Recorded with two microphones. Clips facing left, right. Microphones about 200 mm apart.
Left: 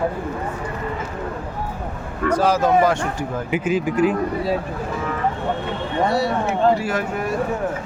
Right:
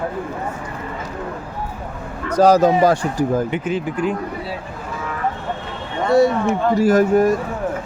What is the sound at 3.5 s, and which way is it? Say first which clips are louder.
Speech: left 2 dB; 10° left (ahead or behind).